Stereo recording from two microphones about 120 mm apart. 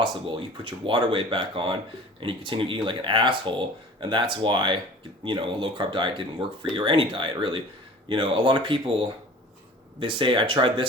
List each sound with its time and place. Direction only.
0.0 s speech: 45° right (ahead or behind)